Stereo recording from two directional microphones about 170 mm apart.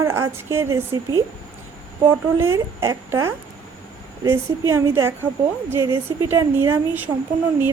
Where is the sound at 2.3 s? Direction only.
15° right (ahead or behind).